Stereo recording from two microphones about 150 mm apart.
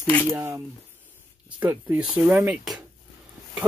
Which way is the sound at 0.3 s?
20° right (ahead or behind).